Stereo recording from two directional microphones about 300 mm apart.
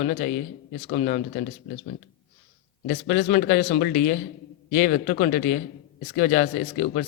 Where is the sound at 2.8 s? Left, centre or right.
Left.